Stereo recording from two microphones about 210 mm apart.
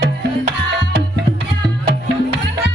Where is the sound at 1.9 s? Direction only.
50° right (ahead or behind).